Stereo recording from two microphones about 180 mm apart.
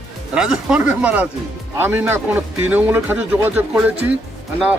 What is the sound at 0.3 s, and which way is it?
Speech, 5° right (ahead or behind).